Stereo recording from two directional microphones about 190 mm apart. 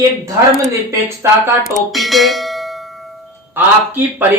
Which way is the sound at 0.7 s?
15° right (ahead or behind).